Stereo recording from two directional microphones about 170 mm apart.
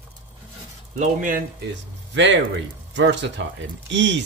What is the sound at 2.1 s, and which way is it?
Speech, 90° right.